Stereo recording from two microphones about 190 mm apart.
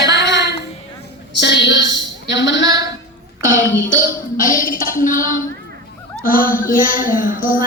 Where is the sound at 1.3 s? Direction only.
65° left (ahead or behind).